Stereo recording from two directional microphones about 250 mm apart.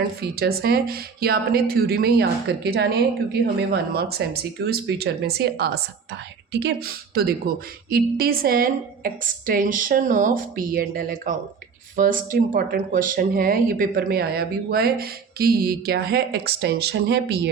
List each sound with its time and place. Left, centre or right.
0.2 s speech: right